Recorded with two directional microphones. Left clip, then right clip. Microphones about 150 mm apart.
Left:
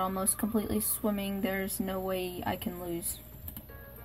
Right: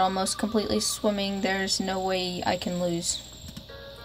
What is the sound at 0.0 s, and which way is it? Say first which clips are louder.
Speech: right 8 dB; 15° right (ahead or behind).